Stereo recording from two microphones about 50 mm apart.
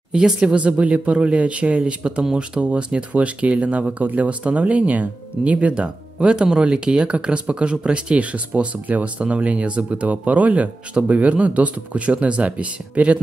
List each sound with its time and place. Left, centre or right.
0.1 s speech: centre